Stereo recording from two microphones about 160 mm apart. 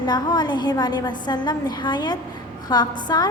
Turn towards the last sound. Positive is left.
turn(degrees=25)  # may be behind; listen again after turning